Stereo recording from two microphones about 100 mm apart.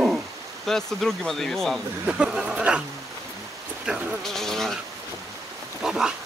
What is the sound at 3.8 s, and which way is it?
Speech, 5° right (ahead or behind).